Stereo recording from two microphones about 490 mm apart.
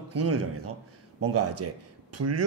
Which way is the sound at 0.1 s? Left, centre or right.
Right.